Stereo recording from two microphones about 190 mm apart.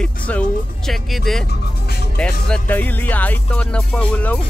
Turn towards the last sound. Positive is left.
turn(degrees=5)  # may be behind; listen again after turning